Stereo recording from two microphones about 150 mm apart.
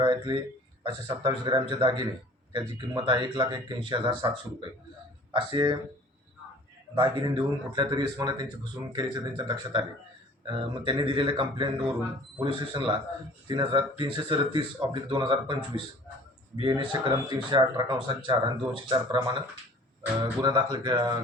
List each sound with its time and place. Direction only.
0.0 s speech: 30° right (ahead or behind)
5.3 s speech: 35° right (ahead or behind)
6.9 s speech: 35° right (ahead or behind)
8.2 s a sound: 30° right (ahead or behind)
10.4 s speech: 35° right (ahead or behind)
20.1 s a sound: 25° right (ahead or behind)